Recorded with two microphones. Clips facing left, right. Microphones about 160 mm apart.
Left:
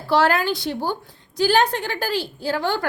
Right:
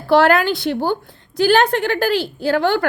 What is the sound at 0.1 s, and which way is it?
A woman's voice, 60° right (ahead or behind).